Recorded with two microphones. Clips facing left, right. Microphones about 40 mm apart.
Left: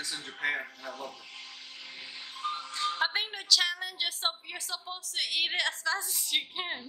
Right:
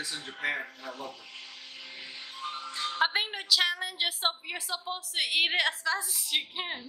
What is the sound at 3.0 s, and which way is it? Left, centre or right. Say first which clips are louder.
Speech: right 1 dB; centre.